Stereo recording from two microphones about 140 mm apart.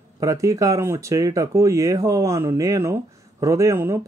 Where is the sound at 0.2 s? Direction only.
25° right (ahead or behind).